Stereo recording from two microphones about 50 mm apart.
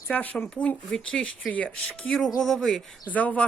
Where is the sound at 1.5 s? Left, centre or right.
Left.